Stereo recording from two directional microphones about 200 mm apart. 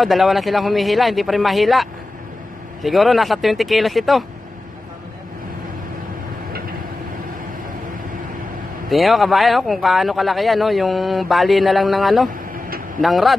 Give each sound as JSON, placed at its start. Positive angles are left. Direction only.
{"t": 0.0, "sound": "speech", "side_deg": 0}
{"t": 8.8, "sound": "speech", "side_deg": 0}